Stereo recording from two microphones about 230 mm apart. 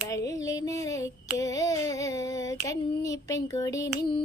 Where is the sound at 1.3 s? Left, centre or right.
Centre.